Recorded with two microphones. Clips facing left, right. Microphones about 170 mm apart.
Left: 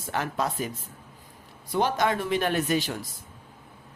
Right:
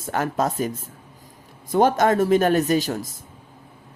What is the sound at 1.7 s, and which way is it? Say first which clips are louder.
Speech: right 7 dB; 45° right (ahead or behind).